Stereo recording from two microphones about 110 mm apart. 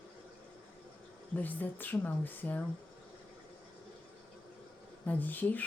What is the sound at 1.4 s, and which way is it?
Speech, 15° left (ahead or behind).